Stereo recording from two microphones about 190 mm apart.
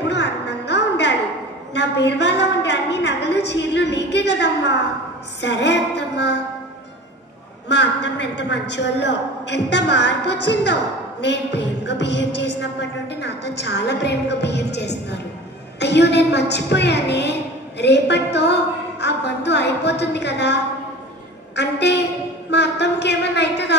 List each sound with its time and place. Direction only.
0.1 s music: 65° left (ahead or behind)
1.7 s a woman's voice: 65° left (ahead or behind)
7.6 s a woman's voice: 65° left (ahead or behind)